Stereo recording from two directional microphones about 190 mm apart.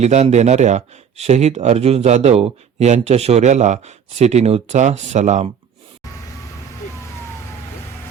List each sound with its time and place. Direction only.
0.0 s speech: 35° right (ahead or behind)